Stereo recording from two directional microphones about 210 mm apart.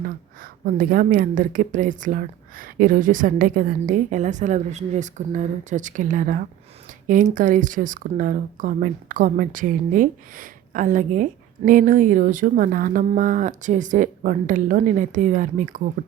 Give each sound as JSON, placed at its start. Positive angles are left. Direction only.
{"t": 0.6, "sound": "a woman's voice", "side_deg": -40}